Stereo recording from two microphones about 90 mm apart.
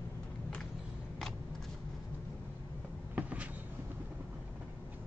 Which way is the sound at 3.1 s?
15° right (ahead or behind).